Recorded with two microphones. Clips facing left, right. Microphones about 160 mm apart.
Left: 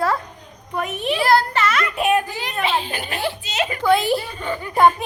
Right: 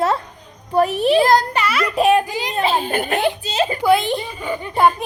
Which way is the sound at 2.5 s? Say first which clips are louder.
Right 4 dB; 40° right (ahead or behind).